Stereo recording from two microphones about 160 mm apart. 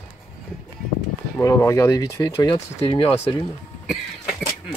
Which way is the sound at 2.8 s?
35° left (ahead or behind).